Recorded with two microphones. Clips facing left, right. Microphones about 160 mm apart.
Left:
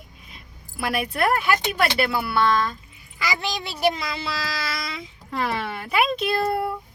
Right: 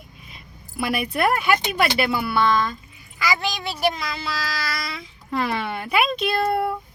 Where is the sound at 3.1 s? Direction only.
25° left (ahead or behind).